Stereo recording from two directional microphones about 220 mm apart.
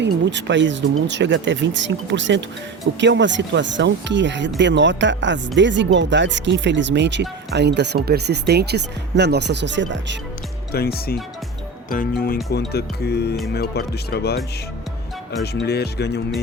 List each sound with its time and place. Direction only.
0.0 s speech: 55° right (ahead or behind)
10.7 s speech: 45° left (ahead or behind)
15.5 s speech: 50° left (ahead or behind)